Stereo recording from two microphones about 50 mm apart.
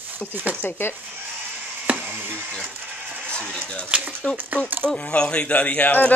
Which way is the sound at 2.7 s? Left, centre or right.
Right.